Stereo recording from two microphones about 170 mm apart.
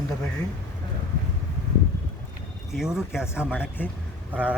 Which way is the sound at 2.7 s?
5° right (ahead or behind).